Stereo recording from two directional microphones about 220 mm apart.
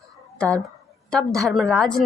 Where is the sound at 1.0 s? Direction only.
Centre (ahead or behind).